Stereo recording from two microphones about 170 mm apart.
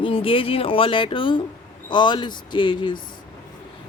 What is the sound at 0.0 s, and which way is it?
Speech, 30° left (ahead or behind).